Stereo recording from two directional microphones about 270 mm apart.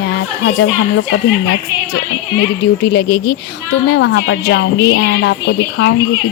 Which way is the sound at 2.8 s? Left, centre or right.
Left.